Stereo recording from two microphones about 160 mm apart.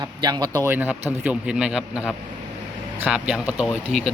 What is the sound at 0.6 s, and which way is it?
A man's voice, 15° right (ahead or behind).